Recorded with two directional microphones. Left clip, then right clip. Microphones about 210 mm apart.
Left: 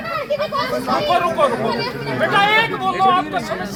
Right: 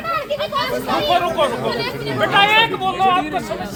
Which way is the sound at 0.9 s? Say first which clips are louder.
Left 1 dB; 15° left (ahead or behind).